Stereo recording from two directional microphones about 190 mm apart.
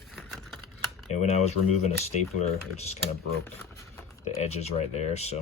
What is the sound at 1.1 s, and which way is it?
Speech, 35° left (ahead or behind).